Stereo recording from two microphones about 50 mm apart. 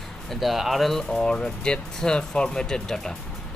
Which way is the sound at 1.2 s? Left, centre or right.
Centre.